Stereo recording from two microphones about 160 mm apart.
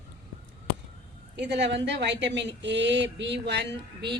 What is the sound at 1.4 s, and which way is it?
A woman's voice, 90° right.